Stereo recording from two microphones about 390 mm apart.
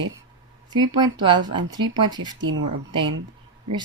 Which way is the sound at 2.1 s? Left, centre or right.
Right.